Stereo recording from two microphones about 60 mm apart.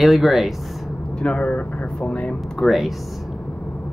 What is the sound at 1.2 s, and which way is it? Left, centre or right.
Speech, centre.